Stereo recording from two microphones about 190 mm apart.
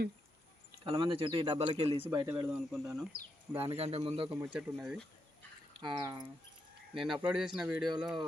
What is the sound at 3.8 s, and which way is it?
Speech, 30° right (ahead or behind).